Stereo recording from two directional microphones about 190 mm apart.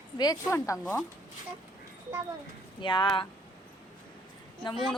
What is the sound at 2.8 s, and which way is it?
Speech, 25° left (ahead or behind).